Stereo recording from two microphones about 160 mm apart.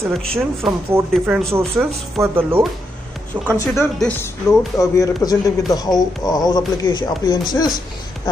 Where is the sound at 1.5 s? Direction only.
20° right (ahead or behind).